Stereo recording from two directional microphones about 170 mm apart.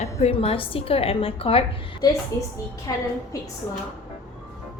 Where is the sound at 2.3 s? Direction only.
15° left (ahead or behind).